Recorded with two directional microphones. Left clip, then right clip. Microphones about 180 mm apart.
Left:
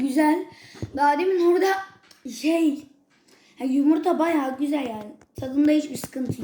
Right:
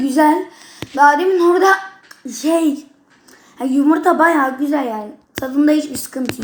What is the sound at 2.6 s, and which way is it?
Speech, centre (ahead or behind).